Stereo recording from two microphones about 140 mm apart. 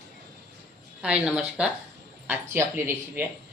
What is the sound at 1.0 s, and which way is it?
Speech, 5° right (ahead or behind).